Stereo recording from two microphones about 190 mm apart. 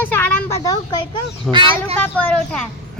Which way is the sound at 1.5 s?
Centre (ahead or behind).